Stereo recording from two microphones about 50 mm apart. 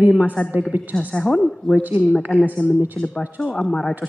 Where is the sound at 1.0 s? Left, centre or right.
Left.